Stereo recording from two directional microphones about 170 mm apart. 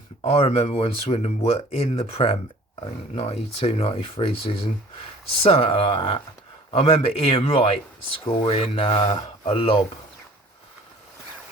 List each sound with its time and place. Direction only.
0.2 s speech: 35° left (ahead or behind)
5.4 s speech: 35° left (ahead or behind)